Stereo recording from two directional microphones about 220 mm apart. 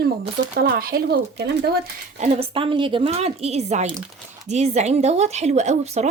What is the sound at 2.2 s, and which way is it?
A woman's voice, 30° right (ahead or behind).